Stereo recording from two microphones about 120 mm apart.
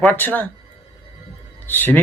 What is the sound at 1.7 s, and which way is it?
Speech, 15° left (ahead or behind).